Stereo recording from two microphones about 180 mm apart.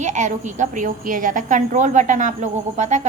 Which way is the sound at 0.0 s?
40° right (ahead or behind).